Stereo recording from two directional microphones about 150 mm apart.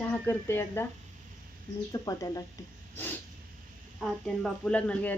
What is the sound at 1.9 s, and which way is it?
Speech, 25° left (ahead or behind).